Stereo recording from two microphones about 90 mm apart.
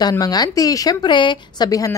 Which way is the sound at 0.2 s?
45° left (ahead or behind).